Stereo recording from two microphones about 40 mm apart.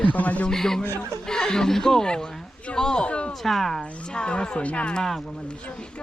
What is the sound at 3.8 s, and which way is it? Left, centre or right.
Speech, left.